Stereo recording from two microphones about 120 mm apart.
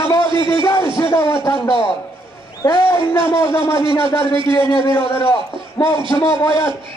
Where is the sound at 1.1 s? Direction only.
25° left (ahead or behind).